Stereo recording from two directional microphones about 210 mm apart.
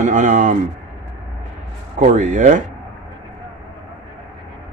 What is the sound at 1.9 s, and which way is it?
Speech, 35° right (ahead or behind).